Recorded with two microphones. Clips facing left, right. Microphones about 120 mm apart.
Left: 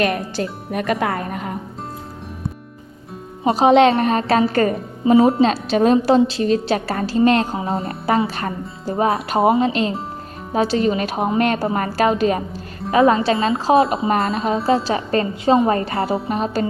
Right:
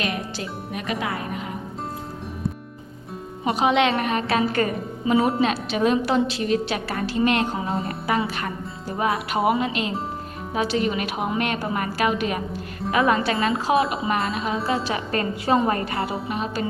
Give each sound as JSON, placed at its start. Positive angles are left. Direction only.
{"t": 0.0, "sound": "speech", "side_deg": 50}
{"t": 3.4, "sound": "a woman's voice", "side_deg": 35}